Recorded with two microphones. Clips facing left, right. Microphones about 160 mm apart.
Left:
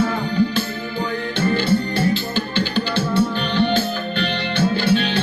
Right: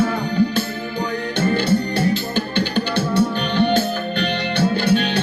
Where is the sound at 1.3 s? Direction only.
50° right (ahead or behind).